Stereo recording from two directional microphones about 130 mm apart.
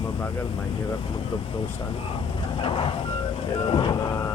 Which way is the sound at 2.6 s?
45° left (ahead or behind).